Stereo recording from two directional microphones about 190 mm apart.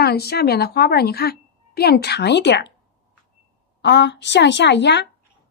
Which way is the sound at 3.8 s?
65° left (ahead or behind).